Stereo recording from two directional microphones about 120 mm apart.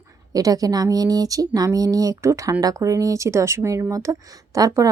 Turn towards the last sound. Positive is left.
turn(degrees=-25)  # may be behind; listen again after turning